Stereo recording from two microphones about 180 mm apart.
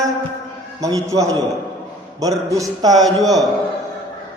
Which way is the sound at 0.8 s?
20° right (ahead or behind).